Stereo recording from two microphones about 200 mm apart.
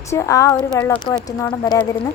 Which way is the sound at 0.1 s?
15° left (ahead or behind).